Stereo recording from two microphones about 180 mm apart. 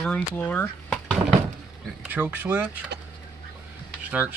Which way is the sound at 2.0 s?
10° right (ahead or behind).